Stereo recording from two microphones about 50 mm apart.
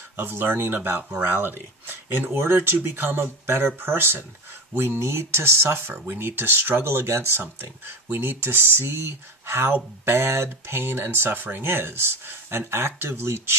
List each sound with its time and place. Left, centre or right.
0.2 s speech: right
2.3 s speech: right